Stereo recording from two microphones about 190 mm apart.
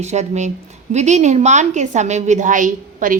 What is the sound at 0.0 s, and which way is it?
A woman's voice, 35° right (ahead or behind).